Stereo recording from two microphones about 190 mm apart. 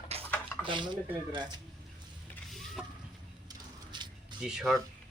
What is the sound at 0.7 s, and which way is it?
Speech, 25° right (ahead or behind).